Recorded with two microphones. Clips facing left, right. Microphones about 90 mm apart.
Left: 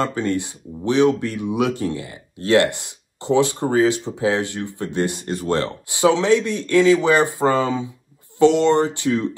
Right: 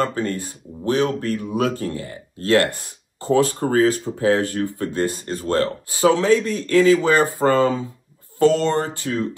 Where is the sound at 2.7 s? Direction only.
40° right (ahead or behind).